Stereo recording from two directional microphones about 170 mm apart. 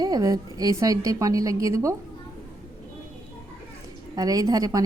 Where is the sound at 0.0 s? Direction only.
20° right (ahead or behind).